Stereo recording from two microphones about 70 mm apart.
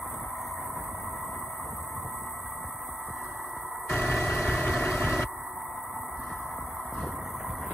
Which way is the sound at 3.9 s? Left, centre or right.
Centre.